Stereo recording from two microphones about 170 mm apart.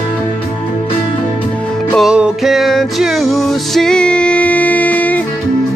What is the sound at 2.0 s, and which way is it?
Music, 5° right (ahead or behind).